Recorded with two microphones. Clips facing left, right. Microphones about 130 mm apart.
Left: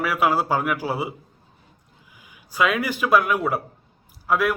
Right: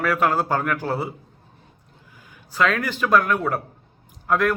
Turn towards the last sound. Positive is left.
turn(degrees=5)  # may be behind; listen again after turning